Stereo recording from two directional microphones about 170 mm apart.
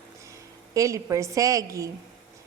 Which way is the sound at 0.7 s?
20° right (ahead or behind).